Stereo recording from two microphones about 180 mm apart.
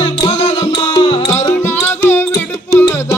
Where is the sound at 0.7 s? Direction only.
25° left (ahead or behind).